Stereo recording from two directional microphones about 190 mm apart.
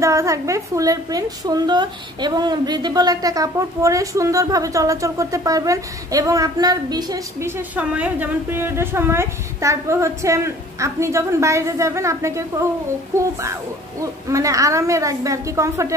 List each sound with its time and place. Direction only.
0.0 s a woman's voice: 15° right (ahead or behind)